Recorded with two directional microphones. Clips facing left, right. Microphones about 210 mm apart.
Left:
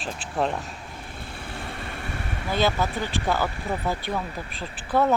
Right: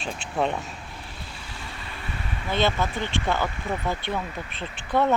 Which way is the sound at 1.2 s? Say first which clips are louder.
Left 4 dB; 55° left (ahead or behind).